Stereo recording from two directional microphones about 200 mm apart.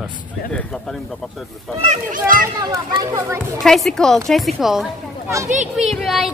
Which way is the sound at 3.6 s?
Centre (ahead or behind).